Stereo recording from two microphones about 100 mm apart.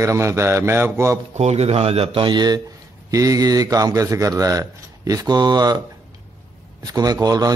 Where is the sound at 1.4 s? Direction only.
90° right.